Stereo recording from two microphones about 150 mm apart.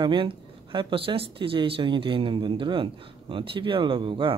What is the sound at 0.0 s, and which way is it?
Speech, 35° right (ahead or behind).